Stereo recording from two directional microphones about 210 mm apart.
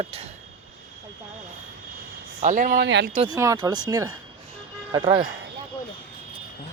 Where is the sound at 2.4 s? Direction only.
35° right (ahead or behind).